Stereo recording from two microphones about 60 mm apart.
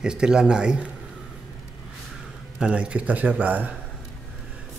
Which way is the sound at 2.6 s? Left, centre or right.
Centre.